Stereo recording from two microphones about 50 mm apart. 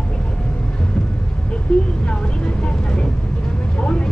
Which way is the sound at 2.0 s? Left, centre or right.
Centre.